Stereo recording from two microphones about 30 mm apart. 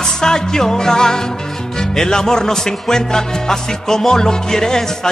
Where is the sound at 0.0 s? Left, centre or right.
Left.